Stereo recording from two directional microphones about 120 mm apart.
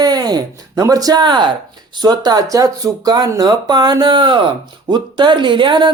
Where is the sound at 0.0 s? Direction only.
35° right (ahead or behind).